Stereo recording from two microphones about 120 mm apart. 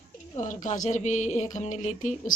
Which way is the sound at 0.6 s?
90° left.